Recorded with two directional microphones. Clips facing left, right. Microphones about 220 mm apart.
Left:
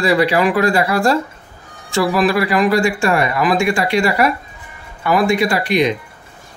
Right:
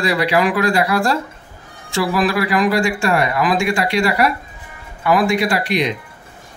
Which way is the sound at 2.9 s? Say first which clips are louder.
Left 1 dB; 50° left (ahead or behind).